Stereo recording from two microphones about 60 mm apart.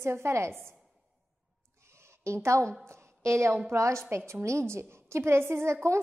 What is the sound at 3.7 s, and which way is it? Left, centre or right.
A woman's voice, right.